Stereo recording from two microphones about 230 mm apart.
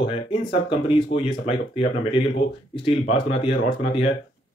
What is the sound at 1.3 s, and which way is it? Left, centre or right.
Speech, left.